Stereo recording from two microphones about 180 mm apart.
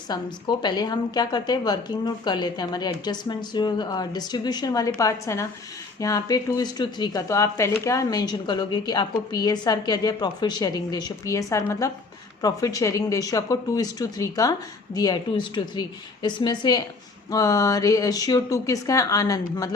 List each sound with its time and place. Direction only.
0.1 s a woman's voice: 25° left (ahead or behind)